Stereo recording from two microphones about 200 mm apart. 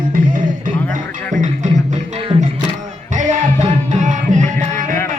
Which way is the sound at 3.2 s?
35° right (ahead or behind).